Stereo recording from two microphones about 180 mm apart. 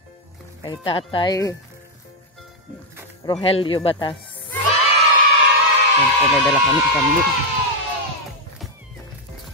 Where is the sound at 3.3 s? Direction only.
30° left (ahead or behind).